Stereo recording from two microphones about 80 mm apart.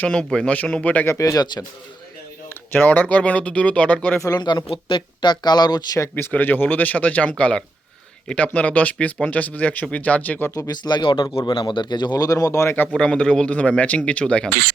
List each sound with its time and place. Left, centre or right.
0.0 s speech: centre
1.2 s speech: left
2.5 s speech: left
4.4 s speech: left
6.3 s speech: left
10.7 s speech: left
13.0 s speech: centre